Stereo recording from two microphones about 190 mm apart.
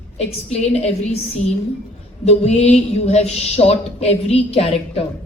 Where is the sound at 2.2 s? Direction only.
35° left (ahead or behind).